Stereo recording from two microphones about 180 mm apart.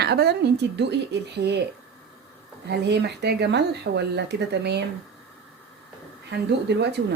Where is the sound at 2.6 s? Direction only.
70° right (ahead or behind).